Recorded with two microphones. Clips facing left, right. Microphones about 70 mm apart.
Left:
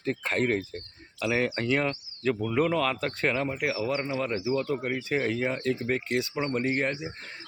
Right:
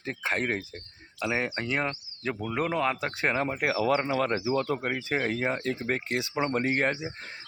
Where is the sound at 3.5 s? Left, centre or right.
Right.